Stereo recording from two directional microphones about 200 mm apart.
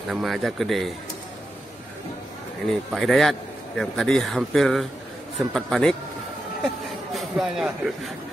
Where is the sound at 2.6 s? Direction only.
Centre (ahead or behind).